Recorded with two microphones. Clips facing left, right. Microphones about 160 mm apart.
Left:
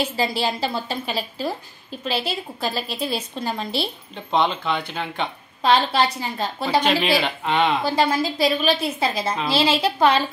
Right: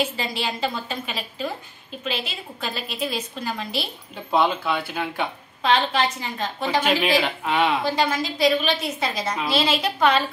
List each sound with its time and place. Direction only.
0.2 s a woman's voice: 35° left (ahead or behind)
4.1 s speech: 5° right (ahead or behind)
5.6 s a woman's voice: 35° left (ahead or behind)
7.4 s speech: 5° right (ahead or behind)
7.8 s a woman's voice: 30° left (ahead or behind)